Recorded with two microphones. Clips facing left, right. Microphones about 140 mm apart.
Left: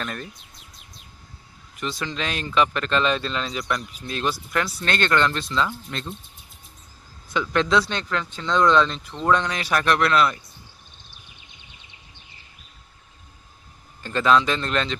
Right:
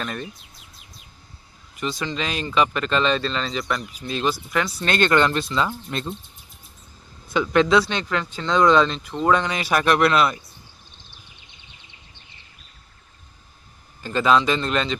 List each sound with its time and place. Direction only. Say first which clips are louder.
0.0 s bird: right 2 dB; centre (ahead or behind)
1.7 s speech: right 2 dB; centre (ahead or behind)
7.5 s speech: right 3 dB; 5° right (ahead or behind)
14.0 s speech: right 1 dB; 5° right (ahead or behind)